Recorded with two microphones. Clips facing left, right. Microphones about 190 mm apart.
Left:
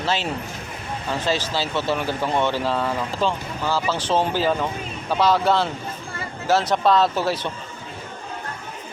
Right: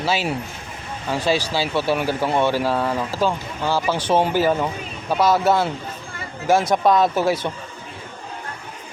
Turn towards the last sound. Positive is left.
turn(degrees=-10)  # may be behind; listen again after turning